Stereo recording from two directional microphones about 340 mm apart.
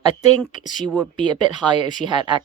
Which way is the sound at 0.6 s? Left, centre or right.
Left.